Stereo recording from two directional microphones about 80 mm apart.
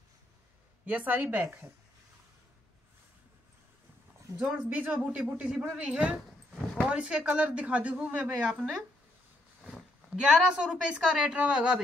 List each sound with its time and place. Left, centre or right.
0.8 s speech: right
4.4 s speech: centre
9.6 s a sound: centre
10.2 s speech: centre